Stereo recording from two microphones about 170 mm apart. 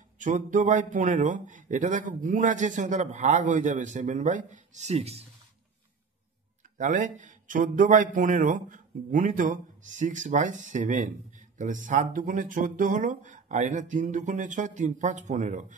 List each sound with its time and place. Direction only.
0.2 s speech: 50° right (ahead or behind)
6.8 s speech: 50° right (ahead or behind)